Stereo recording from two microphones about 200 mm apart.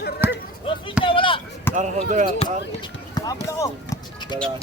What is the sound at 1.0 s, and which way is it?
Speech, 25° left (ahead or behind).